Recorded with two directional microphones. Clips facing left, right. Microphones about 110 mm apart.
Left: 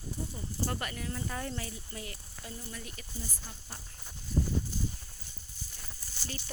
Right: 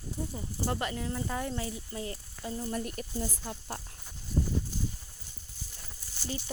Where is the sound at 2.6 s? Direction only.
45° right (ahead or behind); by 3.8 s 65° right (ahead or behind).